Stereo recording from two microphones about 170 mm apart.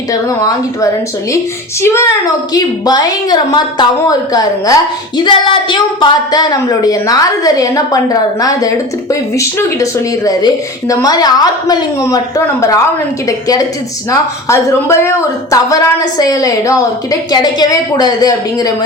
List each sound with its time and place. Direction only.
0.1 s speech: 20° left (ahead or behind)
14.1 s speech: 15° left (ahead or behind)